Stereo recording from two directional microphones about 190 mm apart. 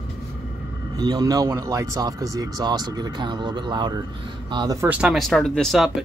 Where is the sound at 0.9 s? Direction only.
20° right (ahead or behind).